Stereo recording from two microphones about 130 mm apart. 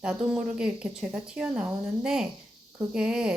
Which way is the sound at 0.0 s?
5° right (ahead or behind).